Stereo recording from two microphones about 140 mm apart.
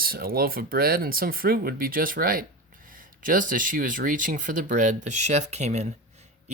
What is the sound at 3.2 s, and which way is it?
Speech, 75° right (ahead or behind).